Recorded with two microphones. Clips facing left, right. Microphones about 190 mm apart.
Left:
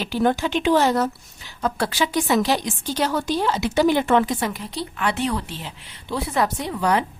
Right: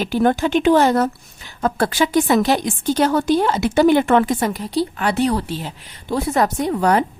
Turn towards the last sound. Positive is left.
turn(degrees=-45)  # may be behind; listen again after turning